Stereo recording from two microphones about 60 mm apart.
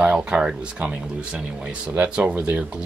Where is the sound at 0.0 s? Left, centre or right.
Centre.